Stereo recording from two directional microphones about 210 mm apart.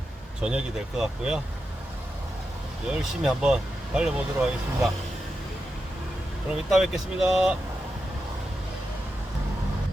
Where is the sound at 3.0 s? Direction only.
Centre (ahead or behind).